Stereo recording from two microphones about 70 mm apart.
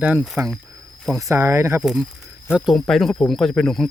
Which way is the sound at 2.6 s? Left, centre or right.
Centre.